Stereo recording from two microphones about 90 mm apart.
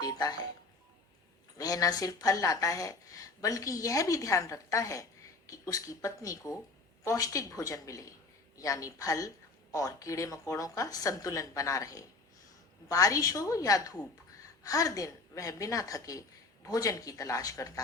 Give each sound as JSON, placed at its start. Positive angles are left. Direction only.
{"t": 0.0, "sound": "music", "side_deg": 45}
{"t": 1.5, "sound": "a woman's voice", "side_deg": 40}